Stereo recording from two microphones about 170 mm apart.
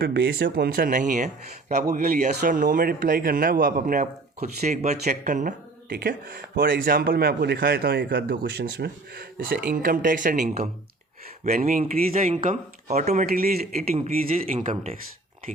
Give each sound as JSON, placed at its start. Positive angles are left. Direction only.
{"t": 0.0, "sound": "a man's voice", "side_deg": -70}
{"t": 5.9, "sound": "speech", "side_deg": -60}
{"t": 11.4, "sound": "speech", "side_deg": -55}
{"t": 12.4, "sound": "a man's voice", "side_deg": -45}
{"t": 13.2, "sound": "speech", "side_deg": -60}
{"t": 14.5, "sound": "a man's voice", "side_deg": -50}